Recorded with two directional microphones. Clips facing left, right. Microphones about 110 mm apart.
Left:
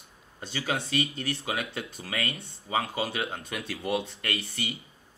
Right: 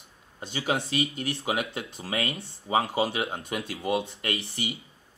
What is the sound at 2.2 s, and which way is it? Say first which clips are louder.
Speech: right 3 dB; 25° right (ahead or behind).